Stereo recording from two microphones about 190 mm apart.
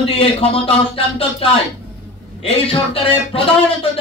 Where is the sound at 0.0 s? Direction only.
30° left (ahead or behind).